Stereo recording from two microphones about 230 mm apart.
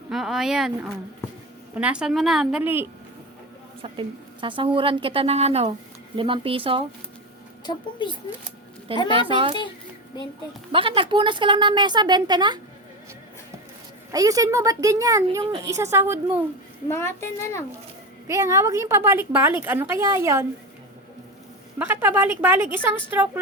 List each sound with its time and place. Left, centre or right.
0.1 s a woman's voice: centre
3.8 s a woman's voice: right
7.7 s speech: centre
8.9 s a woman's voice: right
10.7 s a woman's voice: right
14.1 s a woman's voice: centre
16.9 s a child's voice: centre
18.3 s a woman's voice: centre
21.8 s a woman's voice: centre